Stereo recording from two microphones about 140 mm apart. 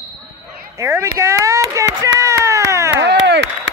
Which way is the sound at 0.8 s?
20° right (ahead or behind).